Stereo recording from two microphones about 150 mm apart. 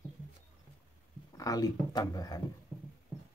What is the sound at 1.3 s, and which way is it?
Speech, 25° left (ahead or behind).